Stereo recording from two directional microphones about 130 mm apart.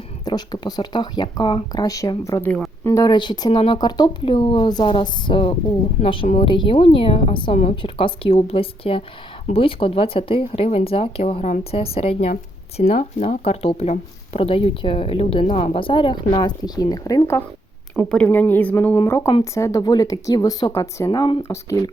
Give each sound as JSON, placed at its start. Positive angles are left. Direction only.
{"t": 0.3, "sound": "speech", "side_deg": 30}
{"t": 2.4, "sound": "speech", "side_deg": 10}
{"t": 2.8, "sound": "speech", "side_deg": 25}
{"t": 3.1, "sound": "speech", "side_deg": 35}
{"t": 18.1, "sound": "speech", "side_deg": 10}
{"t": 21.4, "sound": "speech", "side_deg": 25}